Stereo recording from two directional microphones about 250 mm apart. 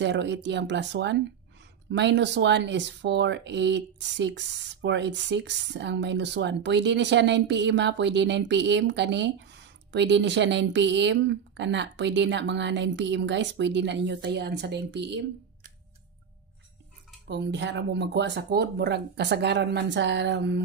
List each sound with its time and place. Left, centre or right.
0.0 s speech: right
17.3 s speech: right